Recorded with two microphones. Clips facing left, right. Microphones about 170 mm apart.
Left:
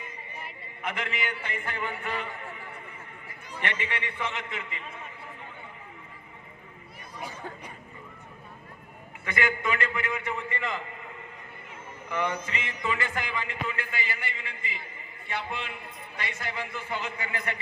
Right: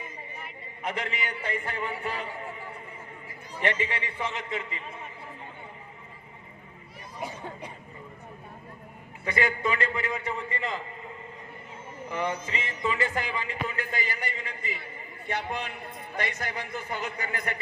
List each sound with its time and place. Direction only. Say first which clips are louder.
0.8 s music: right 1 dB; 35° right (ahead or behind)
9.2 s music: right 1 dB; 35° right (ahead or behind)
12.0 s music: even; 30° right (ahead or behind)
15.3 s a man's voice: right 2 dB; 45° right (ahead or behind)